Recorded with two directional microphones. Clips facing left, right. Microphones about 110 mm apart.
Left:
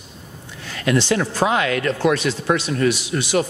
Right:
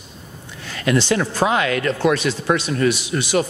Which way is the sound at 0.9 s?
10° right (ahead or behind).